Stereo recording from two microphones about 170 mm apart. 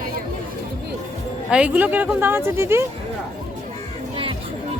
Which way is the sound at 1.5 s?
5° right (ahead or behind).